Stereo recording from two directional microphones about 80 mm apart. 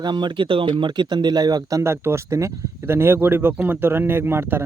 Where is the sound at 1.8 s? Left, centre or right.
Right.